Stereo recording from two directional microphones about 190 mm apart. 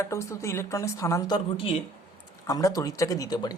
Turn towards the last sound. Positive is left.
turn(degrees=20)  # may be behind; listen again after turning